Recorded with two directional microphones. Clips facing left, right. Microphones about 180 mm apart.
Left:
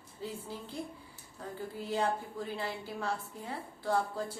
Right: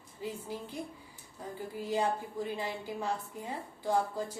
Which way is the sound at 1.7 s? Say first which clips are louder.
Right 1 dB; 15° right (ahead or behind).